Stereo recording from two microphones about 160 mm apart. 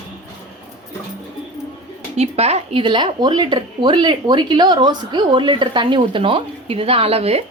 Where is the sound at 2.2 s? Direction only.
40° right (ahead or behind).